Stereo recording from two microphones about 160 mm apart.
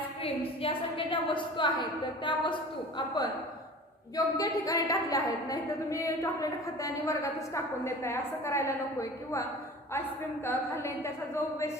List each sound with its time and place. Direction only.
0.2 s a woman's voice: 35° left (ahead or behind)
4.4 s a woman's voice: 20° left (ahead or behind)
10.4 s a woman's voice: 15° left (ahead or behind)